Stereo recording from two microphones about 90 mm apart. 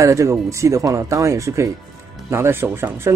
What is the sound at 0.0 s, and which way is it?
A man's voice, 35° right (ahead or behind).